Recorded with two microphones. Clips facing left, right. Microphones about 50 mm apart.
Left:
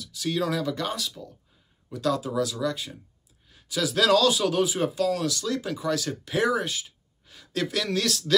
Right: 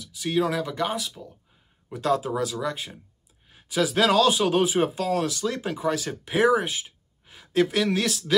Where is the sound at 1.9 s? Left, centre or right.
Right.